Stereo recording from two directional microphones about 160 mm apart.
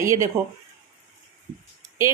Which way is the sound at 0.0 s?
20° right (ahead or behind).